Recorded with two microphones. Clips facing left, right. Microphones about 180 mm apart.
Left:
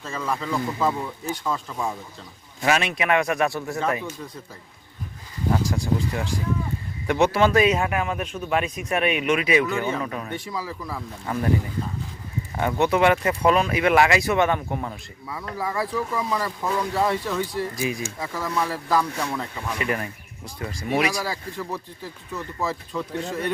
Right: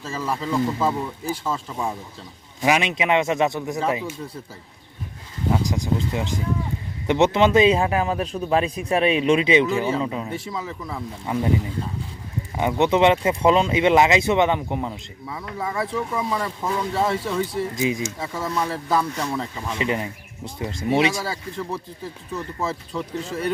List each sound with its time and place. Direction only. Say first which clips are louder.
0.0 s a man's voice: right 1 dB; 5° right (ahead or behind)
2.6 s a man's voice: right 2 dB; 15° right (ahead or behind)
5.6 s a man's voice: right 1 dB; 20° right (ahead or behind)
10.2 s a man's voice: right 1 dB; 5° right (ahead or behind)
11.3 s a man's voice: right 1 dB; 20° right (ahead or behind)
12.5 s a man's voice: right 2 dB; 20° right (ahead or behind)
15.5 s a man's voice: even; centre (ahead or behind)
15.9 s a man's voice: right 1 dB; 25° right (ahead or behind)
16.3 s a man's voice: even; centre (ahead or behind)
17.7 s a man's voice: right 4 dB; 20° right (ahead or behind)
18.9 s a man's voice: even; 5° right (ahead or behind)
19.6 s a man's voice: right 2 dB; 25° right (ahead or behind)
21.2 s a man's voice: right 1 dB; centre (ahead or behind)